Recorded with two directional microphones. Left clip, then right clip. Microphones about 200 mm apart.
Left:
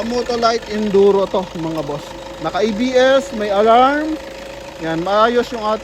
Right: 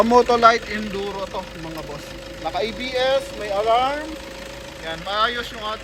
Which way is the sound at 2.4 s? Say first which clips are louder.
Left 7 dB; 55° left (ahead or behind).